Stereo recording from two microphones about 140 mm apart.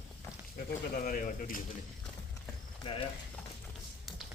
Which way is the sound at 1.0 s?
75° left (ahead or behind).